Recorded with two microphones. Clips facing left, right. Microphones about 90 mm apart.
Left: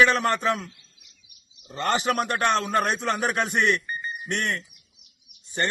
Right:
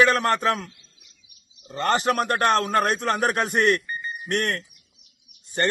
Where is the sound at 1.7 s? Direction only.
40° right (ahead or behind).